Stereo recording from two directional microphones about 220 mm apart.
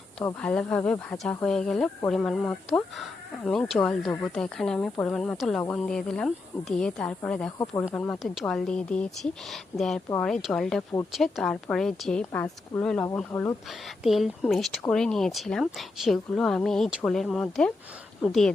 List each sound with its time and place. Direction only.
0.3 s speech: 5° left (ahead or behind)
7.6 s speech: 15° left (ahead or behind)
13.7 s speech: centre (ahead or behind)